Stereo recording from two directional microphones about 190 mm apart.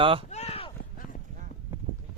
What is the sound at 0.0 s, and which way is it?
Speech, 30° right (ahead or behind).